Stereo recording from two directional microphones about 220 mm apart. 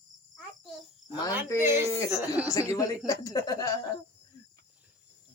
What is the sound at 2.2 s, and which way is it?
Speech, 5° right (ahead or behind).